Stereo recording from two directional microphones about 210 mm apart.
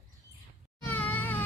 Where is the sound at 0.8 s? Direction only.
10° left (ahead or behind).